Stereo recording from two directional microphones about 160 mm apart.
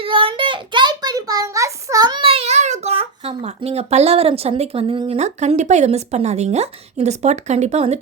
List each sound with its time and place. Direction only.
0.0 s a child's voice: 30° right (ahead or behind)